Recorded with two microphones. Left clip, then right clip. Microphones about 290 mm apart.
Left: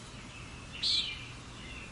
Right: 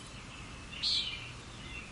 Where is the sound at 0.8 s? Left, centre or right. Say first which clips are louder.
Left 2 dB; left.